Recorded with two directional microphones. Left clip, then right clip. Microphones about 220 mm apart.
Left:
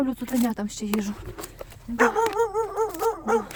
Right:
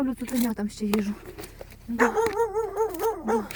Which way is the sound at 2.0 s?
40° left (ahead or behind).